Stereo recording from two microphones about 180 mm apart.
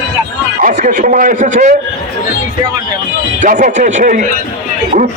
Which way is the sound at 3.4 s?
45° right (ahead or behind).